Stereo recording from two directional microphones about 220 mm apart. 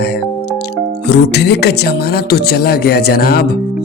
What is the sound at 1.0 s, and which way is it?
Speech, 50° left (ahead or behind).